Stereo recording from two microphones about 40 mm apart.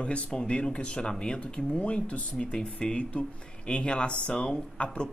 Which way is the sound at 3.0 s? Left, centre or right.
Left.